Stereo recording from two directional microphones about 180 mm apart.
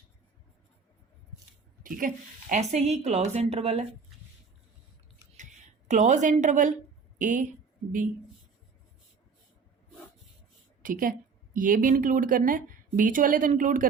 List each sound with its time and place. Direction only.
1.8 s a woman's voice: 50° right (ahead or behind)
5.9 s a woman's voice: 40° right (ahead or behind)
10.8 s a woman's voice: 50° right (ahead or behind)